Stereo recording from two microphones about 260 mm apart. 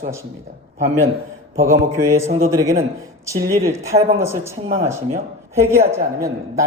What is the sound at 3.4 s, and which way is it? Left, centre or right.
Speech, right.